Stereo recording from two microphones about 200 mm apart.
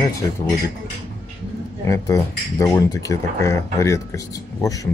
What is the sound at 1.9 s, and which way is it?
Speech, 15° left (ahead or behind).